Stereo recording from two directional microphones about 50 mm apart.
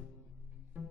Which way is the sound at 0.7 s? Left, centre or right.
Right.